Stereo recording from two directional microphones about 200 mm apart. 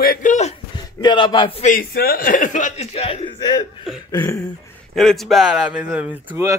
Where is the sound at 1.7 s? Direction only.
50° left (ahead or behind); by 3.7 s 25° left (ahead or behind).